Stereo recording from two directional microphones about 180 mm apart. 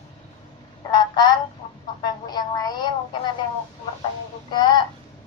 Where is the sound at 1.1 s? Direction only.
25° left (ahead or behind).